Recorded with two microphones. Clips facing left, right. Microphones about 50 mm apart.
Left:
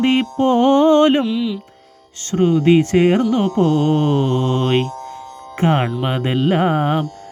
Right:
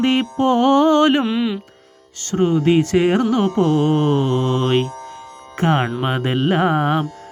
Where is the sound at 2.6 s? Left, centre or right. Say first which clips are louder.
Left 3 dB; left.